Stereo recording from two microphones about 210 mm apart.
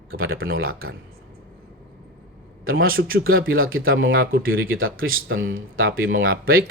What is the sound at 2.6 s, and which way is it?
Speech, 75° right (ahead or behind).